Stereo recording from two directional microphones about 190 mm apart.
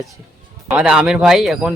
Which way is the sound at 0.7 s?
5° right (ahead or behind).